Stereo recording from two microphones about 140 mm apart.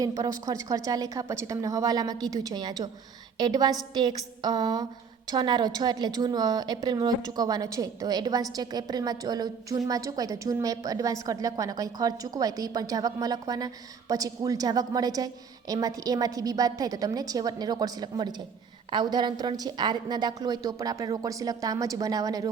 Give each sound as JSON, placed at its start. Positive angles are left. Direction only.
{"t": 0.0, "sound": "a woman's voice", "side_deg": -25}